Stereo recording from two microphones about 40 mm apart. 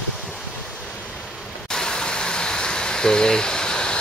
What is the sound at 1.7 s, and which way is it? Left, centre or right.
Vehicle, centre.